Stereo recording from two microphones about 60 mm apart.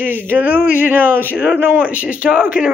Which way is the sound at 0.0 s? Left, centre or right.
Right.